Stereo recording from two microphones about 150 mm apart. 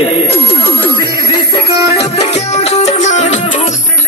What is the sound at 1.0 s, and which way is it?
Music, 30° left (ahead or behind).